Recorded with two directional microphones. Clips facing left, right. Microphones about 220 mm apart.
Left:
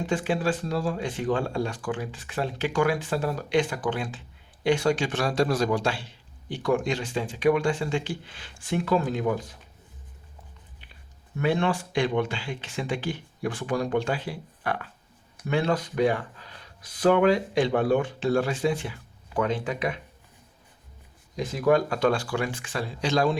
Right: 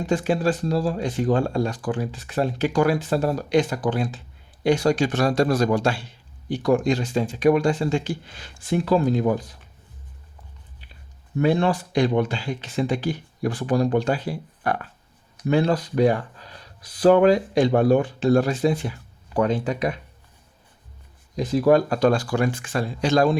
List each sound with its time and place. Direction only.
0.0 s speech: 40° right (ahead or behind)
11.3 s speech: 35° right (ahead or behind)
21.3 s speech: 35° right (ahead or behind)